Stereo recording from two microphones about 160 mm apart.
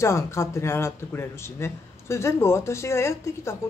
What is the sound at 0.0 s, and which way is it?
Speech, 15° left (ahead or behind).